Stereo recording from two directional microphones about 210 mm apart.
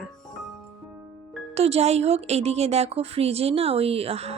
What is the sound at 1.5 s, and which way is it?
A woman's voice, 30° right (ahead or behind).